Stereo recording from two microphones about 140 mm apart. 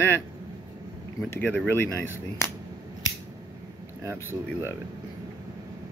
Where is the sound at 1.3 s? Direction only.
10° left (ahead or behind).